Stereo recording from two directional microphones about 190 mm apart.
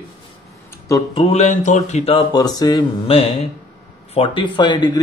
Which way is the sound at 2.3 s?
20° left (ahead or behind).